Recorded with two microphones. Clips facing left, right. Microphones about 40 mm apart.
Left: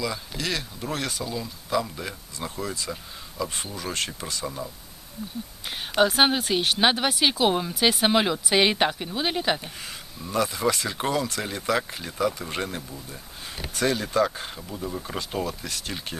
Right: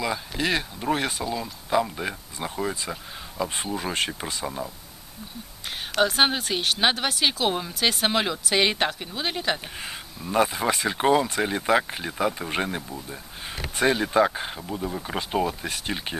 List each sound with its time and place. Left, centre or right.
0.0 s speech: right
6.0 s speech: centre
10.3 s speech: right